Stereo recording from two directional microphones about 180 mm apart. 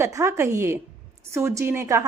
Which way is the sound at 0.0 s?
15° right (ahead or behind).